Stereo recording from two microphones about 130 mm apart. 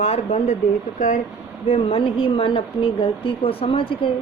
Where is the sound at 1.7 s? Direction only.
50° left (ahead or behind).